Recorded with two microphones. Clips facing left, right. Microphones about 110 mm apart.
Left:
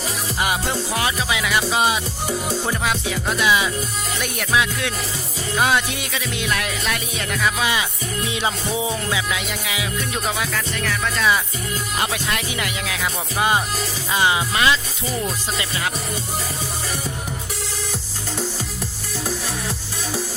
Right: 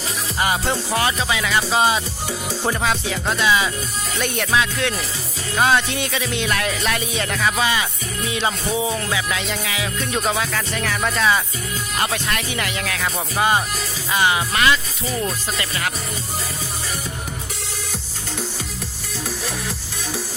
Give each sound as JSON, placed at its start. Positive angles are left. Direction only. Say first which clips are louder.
{"t": 0.3, "sound": "music", "louder": "right 2 dB", "side_deg": 5}
{"t": 3.3, "sound": "speech", "louder": "even", "side_deg": 10}
{"t": 5.5, "sound": "music", "louder": "right 2 dB", "side_deg": 5}
{"t": 8.4, "sound": "speech", "louder": "right 2 dB", "side_deg": 15}
{"t": 10.1, "sound": "music", "louder": "right 5 dB", "side_deg": 0}
{"t": 12.0, "sound": "speech", "louder": "right 1 dB", "side_deg": 10}
{"t": 14.1, "sound": "music", "louder": "right 1 dB", "side_deg": 20}
{"t": 15.0, "sound": "music", "louder": "right 1 dB", "side_deg": 5}